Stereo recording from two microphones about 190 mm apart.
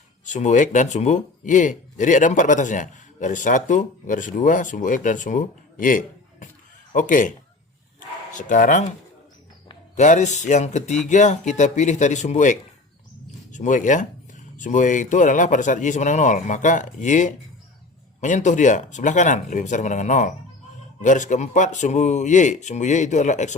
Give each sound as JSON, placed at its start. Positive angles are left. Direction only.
{"t": 0.3, "sound": "speech", "side_deg": 40}
{"t": 7.9, "sound": "bow-wow", "side_deg": 40}
{"t": 9.9, "sound": "speech", "side_deg": 40}